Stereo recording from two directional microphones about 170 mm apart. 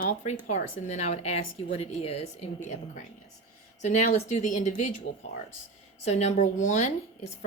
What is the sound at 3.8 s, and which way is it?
Speech, 45° left (ahead or behind).